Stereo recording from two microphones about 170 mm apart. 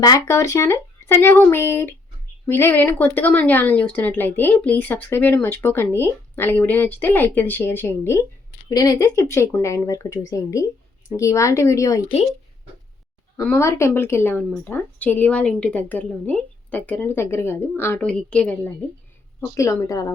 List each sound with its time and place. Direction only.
0.0 s speech: 20° left (ahead or behind)
12.0 s speech: 35° left (ahead or behind)
13.4 s speech: 15° left (ahead or behind)
19.4 s speech: 20° left (ahead or behind)